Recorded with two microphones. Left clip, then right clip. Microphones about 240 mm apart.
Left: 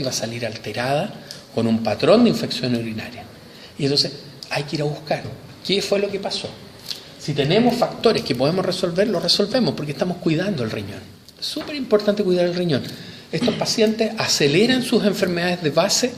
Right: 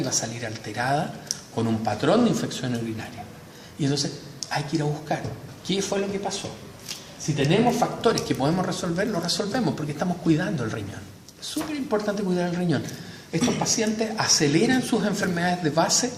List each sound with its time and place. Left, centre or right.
0.2 s speech: left